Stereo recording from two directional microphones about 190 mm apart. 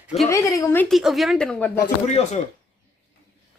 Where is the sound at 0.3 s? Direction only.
15° left (ahead or behind).